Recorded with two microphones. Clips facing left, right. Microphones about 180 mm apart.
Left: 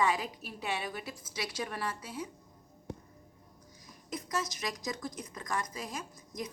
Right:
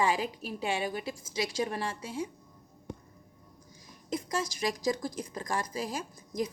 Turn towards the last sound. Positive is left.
turn(degrees=-30)  # may be behind; listen again after turning